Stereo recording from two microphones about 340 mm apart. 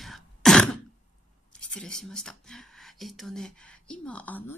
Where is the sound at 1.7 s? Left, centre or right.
Centre.